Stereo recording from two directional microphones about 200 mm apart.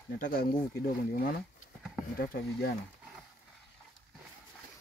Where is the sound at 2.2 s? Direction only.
50° left (ahead or behind).